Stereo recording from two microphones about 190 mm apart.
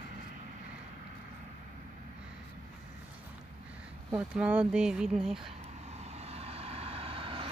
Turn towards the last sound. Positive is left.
turn(degrees=-30)  # may be behind; listen again after turning